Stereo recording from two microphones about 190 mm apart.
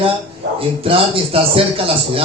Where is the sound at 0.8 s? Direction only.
30° right (ahead or behind).